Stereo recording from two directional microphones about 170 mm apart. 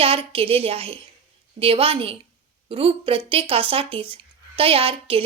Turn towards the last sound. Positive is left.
turn(degrees=-35)  # may be behind; listen again after turning